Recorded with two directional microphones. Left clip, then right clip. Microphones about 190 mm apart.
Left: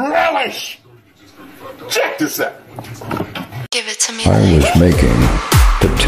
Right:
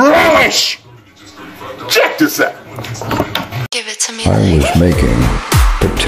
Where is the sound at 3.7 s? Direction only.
Centre (ahead or behind).